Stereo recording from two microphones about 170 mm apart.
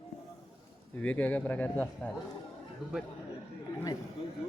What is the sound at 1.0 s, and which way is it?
A man's voice, 10° left (ahead or behind).